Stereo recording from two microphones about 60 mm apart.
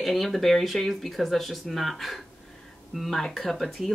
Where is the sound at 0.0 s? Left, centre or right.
Centre.